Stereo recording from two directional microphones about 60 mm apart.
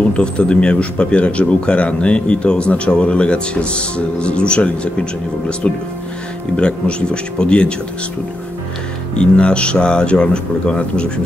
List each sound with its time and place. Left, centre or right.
0.1 s speech: centre
6.5 s speech: centre
9.1 s speech: centre